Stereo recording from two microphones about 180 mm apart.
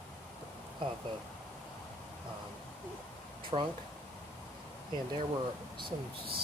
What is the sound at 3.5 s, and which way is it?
Speech, 30° right (ahead or behind).